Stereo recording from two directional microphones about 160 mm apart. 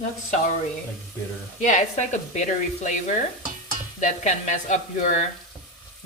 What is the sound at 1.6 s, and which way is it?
Speech, 50° left (ahead or behind).